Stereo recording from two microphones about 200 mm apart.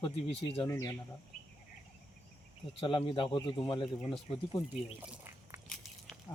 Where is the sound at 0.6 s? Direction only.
15° left (ahead or behind).